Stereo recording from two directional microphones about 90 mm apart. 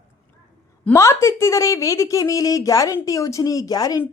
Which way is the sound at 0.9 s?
35° left (ahead or behind).